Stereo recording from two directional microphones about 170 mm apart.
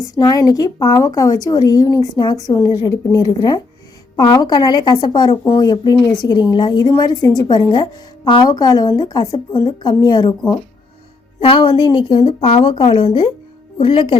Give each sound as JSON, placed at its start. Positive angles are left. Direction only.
{"t": 0.1, "sound": "a woman's voice", "side_deg": 20}